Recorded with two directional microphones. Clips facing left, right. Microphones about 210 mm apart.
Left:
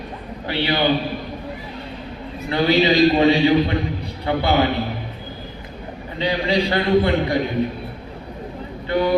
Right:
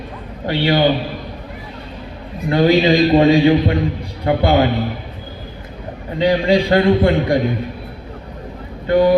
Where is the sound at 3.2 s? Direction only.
45° right (ahead or behind).